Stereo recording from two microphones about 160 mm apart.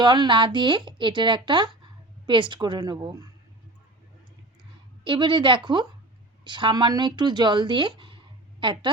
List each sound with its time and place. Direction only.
0.0 s speech: 30° right (ahead or behind)
5.0 s speech: 30° right (ahead or behind)